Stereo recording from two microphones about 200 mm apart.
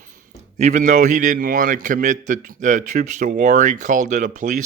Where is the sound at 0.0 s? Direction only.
35° right (ahead or behind).